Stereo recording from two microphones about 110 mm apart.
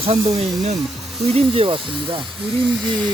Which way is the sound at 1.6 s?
50° right (ahead or behind).